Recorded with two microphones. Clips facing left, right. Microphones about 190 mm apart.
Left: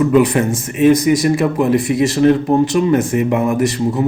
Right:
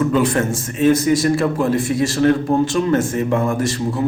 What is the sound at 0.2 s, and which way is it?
A man's voice, 15° left (ahead or behind).